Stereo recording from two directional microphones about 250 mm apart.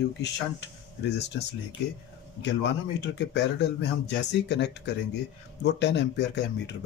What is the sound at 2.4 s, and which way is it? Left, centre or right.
Speech, left.